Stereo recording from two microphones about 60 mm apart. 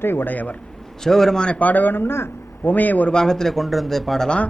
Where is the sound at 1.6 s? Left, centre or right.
Left.